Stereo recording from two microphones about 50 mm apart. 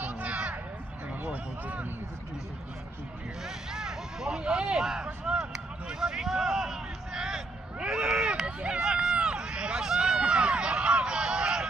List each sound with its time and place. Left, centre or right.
0.0 s a sound: right
1.2 s speech: right
3.4 s speech: centre
8.3 s speech: right